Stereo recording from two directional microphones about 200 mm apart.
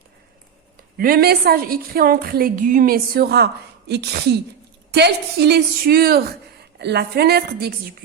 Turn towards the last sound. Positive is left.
turn(degrees=-55)  # may be behind; listen again after turning